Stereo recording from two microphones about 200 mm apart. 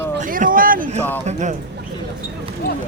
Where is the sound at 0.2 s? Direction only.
40° right (ahead or behind).